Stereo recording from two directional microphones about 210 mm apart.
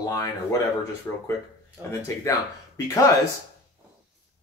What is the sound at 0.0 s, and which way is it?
Speech, 15° left (ahead or behind).